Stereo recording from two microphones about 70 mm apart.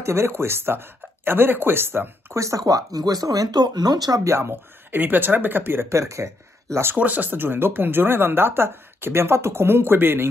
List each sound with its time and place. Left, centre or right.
0.0 s speech: right
2.3 s speech: right
4.2 s speech: right
6.9 s speech: right